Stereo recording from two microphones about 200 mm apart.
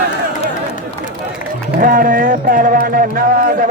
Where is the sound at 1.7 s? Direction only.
45° right (ahead or behind).